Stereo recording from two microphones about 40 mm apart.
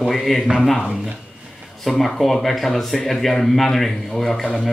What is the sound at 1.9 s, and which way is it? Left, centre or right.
Speech, centre.